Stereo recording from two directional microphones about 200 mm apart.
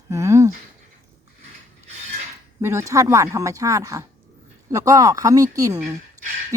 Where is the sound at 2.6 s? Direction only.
15° right (ahead or behind).